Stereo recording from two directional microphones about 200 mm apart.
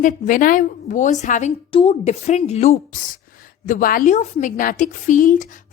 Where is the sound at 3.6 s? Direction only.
45° left (ahead or behind).